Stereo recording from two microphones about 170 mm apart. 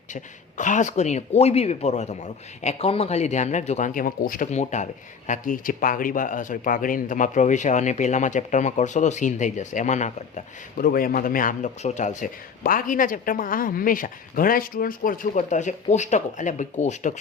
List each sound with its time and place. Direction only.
0.1 s speech: 50° left (ahead or behind)